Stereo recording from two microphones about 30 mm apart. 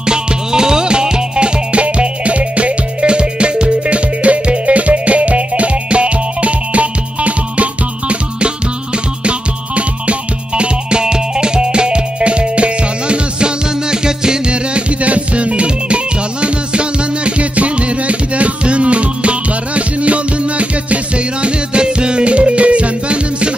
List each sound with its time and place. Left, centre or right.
0.0 s music: right
3.0 s music: right
14.5 s music: right